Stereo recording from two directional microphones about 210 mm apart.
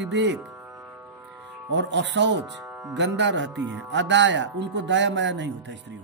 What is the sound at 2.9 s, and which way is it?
Mantra, 60° right (ahead or behind).